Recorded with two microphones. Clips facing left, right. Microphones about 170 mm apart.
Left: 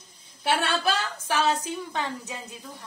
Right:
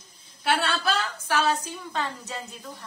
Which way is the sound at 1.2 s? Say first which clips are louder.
Left 1 dB; 15° left (ahead or behind).